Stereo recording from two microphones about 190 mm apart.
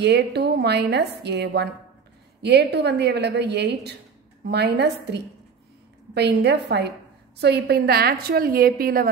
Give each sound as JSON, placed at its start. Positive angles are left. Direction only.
{"t": 0.0, "sound": "a woman's voice", "side_deg": -60}